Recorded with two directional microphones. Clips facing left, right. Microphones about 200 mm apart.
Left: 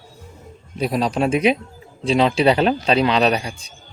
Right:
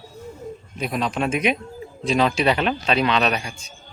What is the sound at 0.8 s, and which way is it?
A man's voice, 35° left (ahead or behind).